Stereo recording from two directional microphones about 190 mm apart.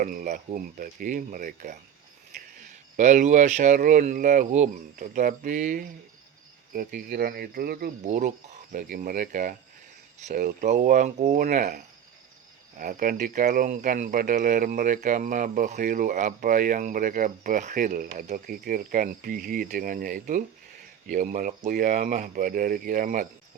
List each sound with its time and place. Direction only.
0.0 s speech: 45° right (ahead or behind)
8.0 s speech: 35° right (ahead or behind)